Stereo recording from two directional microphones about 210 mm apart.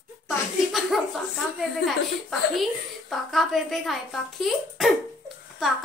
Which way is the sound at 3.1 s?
Centre (ahead or behind).